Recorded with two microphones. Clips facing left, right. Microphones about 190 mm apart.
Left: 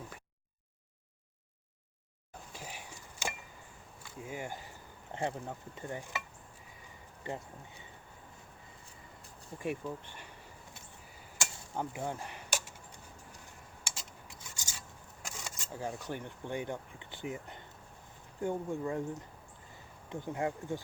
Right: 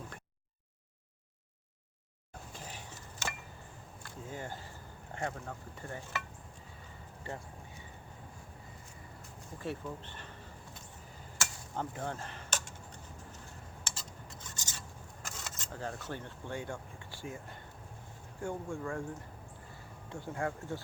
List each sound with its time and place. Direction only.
2.5 s a sound: 10° left (ahead or behind)
4.3 s sizzle: 15° left (ahead or behind)
7.3 s speech: 20° left (ahead or behind)
9.6 s sizzle: 15° left (ahead or behind)
11.3 s a sound: 10° left (ahead or behind)
13.8 s rub: 10° left (ahead or behind)
15.2 s speech: 10° left (ahead or behind)
20.1 s sizzle: 20° left (ahead or behind)